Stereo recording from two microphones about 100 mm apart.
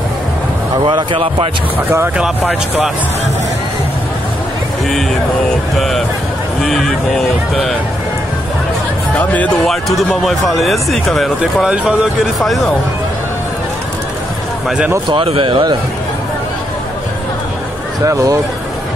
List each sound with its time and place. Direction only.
0.8 s speech: 55° right (ahead or behind)
2.1 s speech: 5° right (ahead or behind)
5.8 s speech: centre (ahead or behind)
9.7 s speech: centre (ahead or behind)
15.2 s a man's voice: 70° right (ahead or behind)
18.0 s speech: 35° right (ahead or behind)